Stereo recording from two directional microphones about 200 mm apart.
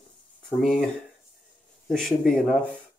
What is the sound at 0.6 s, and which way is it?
Speech, centre (ahead or behind).